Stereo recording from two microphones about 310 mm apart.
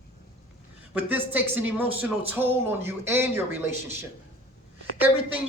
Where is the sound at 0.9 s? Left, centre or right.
Centre.